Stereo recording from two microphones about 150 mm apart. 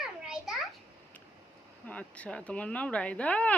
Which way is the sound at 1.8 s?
10° left (ahead or behind).